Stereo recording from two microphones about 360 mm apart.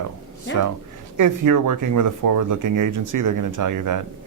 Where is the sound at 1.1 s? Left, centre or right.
Right.